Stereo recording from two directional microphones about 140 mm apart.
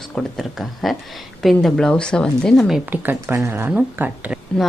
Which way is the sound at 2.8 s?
15° right (ahead or behind).